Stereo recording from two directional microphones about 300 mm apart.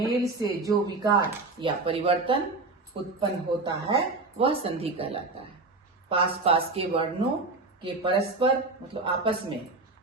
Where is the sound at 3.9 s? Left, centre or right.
Centre.